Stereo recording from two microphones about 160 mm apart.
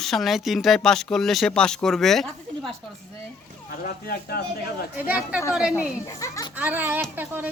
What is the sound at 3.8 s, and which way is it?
Speech, 75° left (ahead or behind).